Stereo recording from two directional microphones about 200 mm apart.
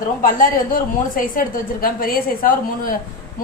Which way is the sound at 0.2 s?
45° left (ahead or behind).